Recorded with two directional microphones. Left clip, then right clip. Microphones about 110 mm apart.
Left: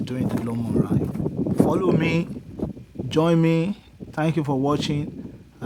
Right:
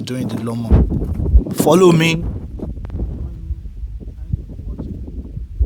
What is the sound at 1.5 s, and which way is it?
Speech, 60° right (ahead or behind).